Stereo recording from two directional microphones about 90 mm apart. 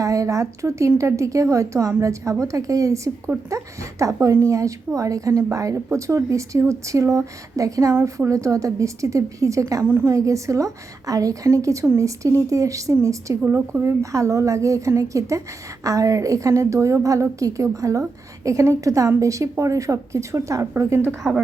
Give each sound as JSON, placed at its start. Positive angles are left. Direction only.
{"t": 0.0, "sound": "a woman's voice", "side_deg": -35}
{"t": 9.8, "sound": "a woman's voice", "side_deg": -25}